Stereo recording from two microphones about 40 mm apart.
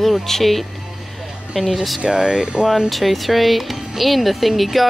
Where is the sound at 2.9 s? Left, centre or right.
Centre.